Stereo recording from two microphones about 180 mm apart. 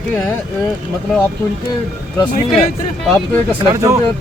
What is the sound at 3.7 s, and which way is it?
Speech, 15° right (ahead or behind).